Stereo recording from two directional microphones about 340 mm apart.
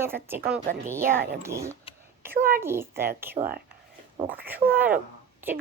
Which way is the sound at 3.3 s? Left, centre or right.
Right.